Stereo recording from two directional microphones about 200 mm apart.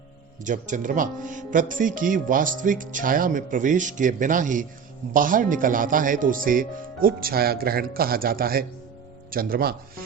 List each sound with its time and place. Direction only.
0.4 s speech: 40° right (ahead or behind)